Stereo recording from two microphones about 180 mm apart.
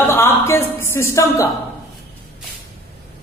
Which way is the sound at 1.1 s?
15° left (ahead or behind).